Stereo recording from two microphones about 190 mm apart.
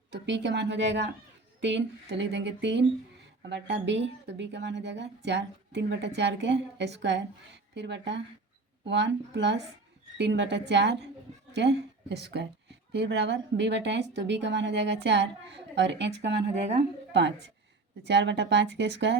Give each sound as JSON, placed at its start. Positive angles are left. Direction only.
{"t": 0.1, "sound": "a woman's voice", "side_deg": -65}
{"t": 16.6, "sound": "a woman's voice", "side_deg": -35}
{"t": 17.1, "sound": "a woman's voice", "side_deg": -65}